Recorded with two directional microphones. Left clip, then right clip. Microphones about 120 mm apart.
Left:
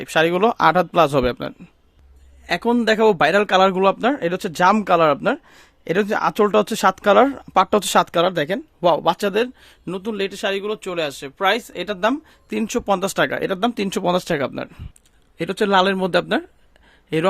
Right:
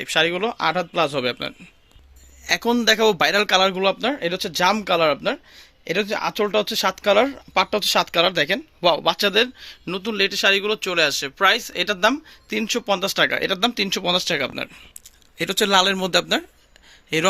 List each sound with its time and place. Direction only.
0.0 s a man's voice: 65° left (ahead or behind)
2.5 s a man's voice: 45° left (ahead or behind); by 11.9 s 30° left (ahead or behind)
12.6 s speech: 80° left
13.3 s a man's voice: 55° left (ahead or behind)